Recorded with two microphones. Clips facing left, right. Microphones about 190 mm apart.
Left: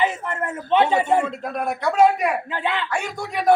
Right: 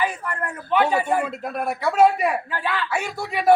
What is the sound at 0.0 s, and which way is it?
A man's voice, 20° left (ahead or behind).